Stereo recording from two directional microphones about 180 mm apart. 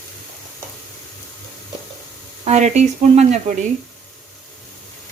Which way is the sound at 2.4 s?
40° right (ahead or behind).